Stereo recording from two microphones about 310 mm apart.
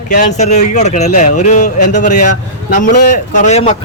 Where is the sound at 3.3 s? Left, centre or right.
Left.